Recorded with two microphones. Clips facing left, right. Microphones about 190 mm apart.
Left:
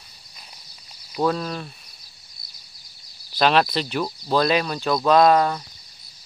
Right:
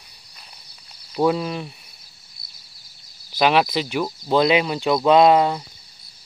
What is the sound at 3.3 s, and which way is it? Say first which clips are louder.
Speech: right 1 dB; 15° right (ahead or behind).